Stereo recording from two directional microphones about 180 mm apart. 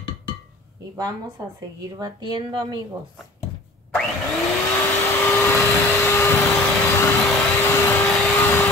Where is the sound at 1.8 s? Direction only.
20° right (ahead or behind).